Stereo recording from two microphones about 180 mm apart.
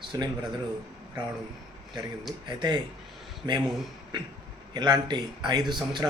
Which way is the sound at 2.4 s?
25° right (ahead or behind).